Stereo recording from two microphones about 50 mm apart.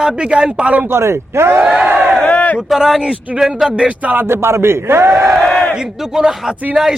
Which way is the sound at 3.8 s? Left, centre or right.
Right.